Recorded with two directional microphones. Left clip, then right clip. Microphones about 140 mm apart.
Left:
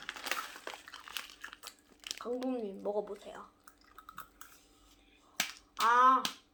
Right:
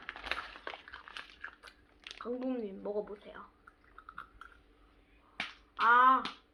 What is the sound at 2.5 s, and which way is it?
Speech, 10° right (ahead or behind).